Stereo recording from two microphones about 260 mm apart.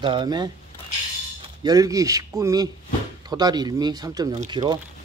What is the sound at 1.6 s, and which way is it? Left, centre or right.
Speech, centre.